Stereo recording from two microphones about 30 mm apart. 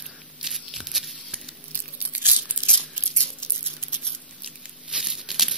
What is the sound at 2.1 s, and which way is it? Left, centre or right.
Tearing, right.